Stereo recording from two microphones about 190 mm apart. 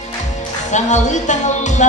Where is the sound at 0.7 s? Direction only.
40° left (ahead or behind).